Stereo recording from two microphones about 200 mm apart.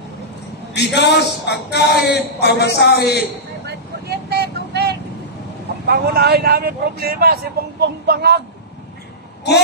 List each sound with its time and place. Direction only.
0.7 s speech: 55° left (ahead or behind)
3.6 s vehicle: 55° right (ahead or behind)
5.9 s speech: 50° right (ahead or behind)